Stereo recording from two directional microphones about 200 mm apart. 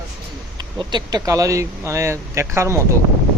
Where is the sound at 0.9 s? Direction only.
20° right (ahead or behind).